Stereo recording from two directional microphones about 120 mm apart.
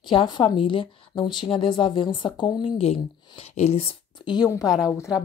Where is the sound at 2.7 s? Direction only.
55° left (ahead or behind).